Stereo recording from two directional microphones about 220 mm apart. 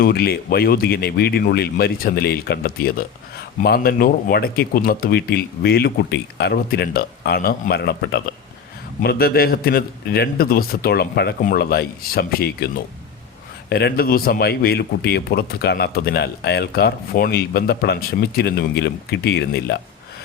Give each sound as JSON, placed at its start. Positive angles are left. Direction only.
{"t": 0.0, "sound": "speech", "side_deg": 45}
{"t": 13.7, "sound": "speech", "side_deg": 45}